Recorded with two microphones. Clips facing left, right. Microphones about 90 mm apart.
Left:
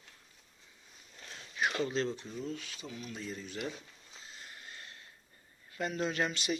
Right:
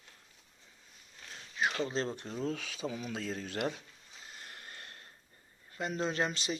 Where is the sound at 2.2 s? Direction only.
75° right (ahead or behind).